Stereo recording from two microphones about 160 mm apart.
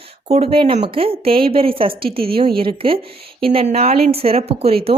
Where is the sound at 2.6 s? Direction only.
35° right (ahead or behind).